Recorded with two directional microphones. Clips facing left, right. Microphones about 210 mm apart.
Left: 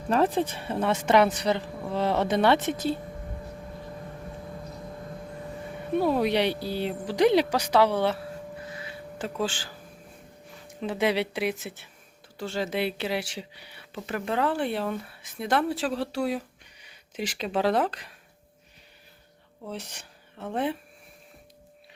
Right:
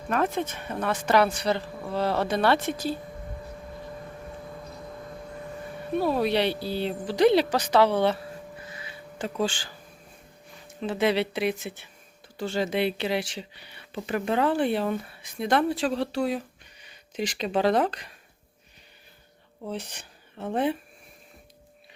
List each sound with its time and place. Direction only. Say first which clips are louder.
0.1 s speech: left 3 dB; 30° left (ahead or behind)
5.9 s speech: left 1 dB; 15° left (ahead or behind)
8.7 s a sound: left 3 dB; centre (ahead or behind)
10.8 s speech: right 1 dB; 10° left (ahead or behind)
19.6 s speech: right 3 dB; centre (ahead or behind)